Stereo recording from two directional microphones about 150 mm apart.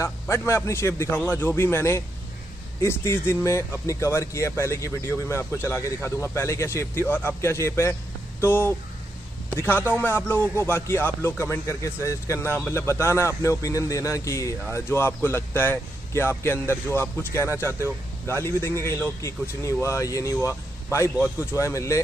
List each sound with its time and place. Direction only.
0.0 s speech: 20° left (ahead or behind)